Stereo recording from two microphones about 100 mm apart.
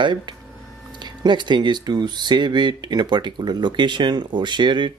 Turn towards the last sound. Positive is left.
turn(degrees=-50)  # may be behind; listen again after turning